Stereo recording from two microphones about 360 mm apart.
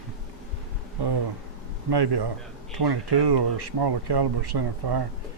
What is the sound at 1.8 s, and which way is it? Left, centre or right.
Speech, right.